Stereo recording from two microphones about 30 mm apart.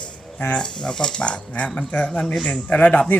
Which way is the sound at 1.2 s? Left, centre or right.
Left.